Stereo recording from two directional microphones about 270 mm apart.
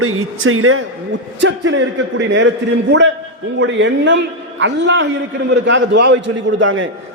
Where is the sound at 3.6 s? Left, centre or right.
Right.